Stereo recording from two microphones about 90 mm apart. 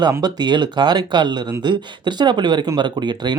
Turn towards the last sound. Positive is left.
turn(degrees=-55)  # may be behind; listen again after turning